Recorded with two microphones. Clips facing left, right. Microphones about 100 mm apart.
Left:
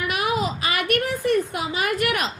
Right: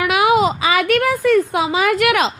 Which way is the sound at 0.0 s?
90° right.